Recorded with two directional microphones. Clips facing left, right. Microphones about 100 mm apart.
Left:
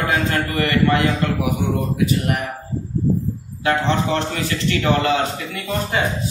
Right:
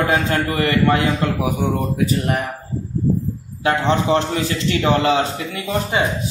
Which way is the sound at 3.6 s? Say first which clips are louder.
Right 2 dB; 30° right (ahead or behind).